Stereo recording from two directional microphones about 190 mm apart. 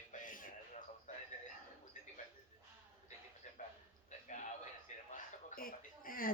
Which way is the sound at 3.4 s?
40° left (ahead or behind).